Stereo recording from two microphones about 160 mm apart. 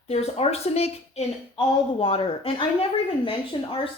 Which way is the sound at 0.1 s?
40° left (ahead or behind).